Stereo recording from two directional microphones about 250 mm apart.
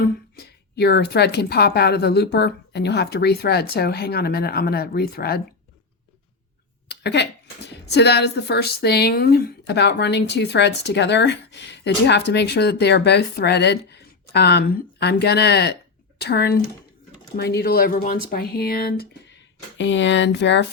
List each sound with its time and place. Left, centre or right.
0.3 s a woman's voice: left
6.8 s a woman's voice: left